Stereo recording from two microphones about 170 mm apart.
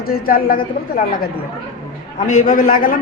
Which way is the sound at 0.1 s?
60° left (ahead or behind).